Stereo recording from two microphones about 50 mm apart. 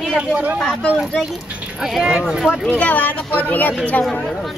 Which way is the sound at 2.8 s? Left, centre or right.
Left.